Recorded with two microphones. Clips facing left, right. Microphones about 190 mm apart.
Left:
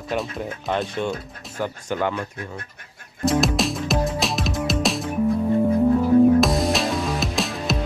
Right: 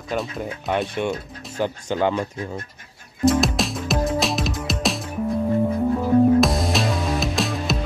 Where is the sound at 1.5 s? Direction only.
25° right (ahead or behind).